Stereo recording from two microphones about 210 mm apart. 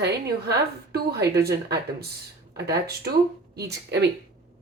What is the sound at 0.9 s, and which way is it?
Speech, 50° right (ahead or behind).